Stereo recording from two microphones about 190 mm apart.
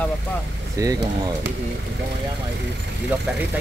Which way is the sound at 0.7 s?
20° right (ahead or behind).